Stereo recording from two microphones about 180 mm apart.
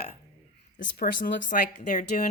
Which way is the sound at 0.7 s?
50° left (ahead or behind).